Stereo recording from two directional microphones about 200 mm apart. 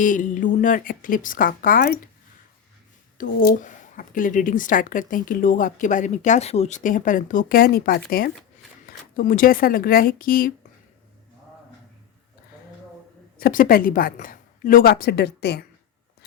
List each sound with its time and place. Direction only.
0.0 s a woman's voice: 40° left (ahead or behind)
3.2 s a woman's voice: 45° left (ahead or behind)
13.4 s a woman's voice: 45° left (ahead or behind)